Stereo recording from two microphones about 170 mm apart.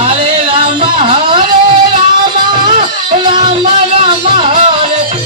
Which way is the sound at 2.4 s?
25° right (ahead or behind).